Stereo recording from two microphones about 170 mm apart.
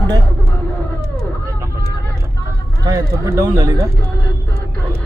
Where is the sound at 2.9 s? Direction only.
20° right (ahead or behind).